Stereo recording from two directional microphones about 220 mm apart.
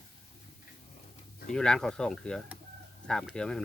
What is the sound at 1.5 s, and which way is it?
Speech, 5° left (ahead or behind).